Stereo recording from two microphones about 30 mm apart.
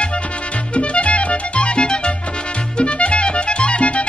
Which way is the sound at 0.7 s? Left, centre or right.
Left.